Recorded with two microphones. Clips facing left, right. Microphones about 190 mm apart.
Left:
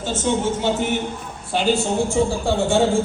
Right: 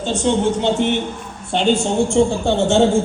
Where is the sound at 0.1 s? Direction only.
5° left (ahead or behind).